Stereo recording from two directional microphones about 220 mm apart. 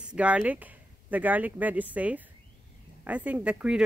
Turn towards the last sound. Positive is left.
turn(degrees=-5)  # may be behind; listen again after turning